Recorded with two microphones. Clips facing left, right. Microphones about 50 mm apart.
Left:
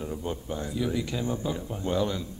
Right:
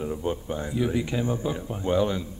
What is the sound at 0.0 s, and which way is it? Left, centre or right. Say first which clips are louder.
Speech: right 4 dB; centre.